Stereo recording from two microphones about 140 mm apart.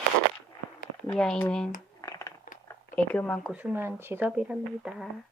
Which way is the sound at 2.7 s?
10° left (ahead or behind).